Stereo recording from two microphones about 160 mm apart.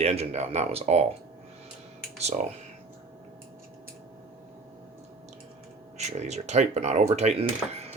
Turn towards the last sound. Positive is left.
turn(degrees=-40)  # may be behind; listen again after turning